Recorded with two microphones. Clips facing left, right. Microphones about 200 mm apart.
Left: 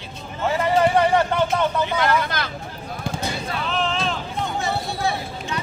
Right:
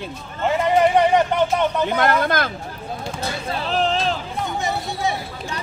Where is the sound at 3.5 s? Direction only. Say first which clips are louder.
Right 5 dB; 35° right (ahead or behind).